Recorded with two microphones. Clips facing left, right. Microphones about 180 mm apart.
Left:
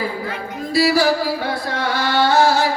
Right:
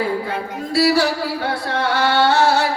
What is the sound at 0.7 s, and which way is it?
Music, 65° right (ahead or behind).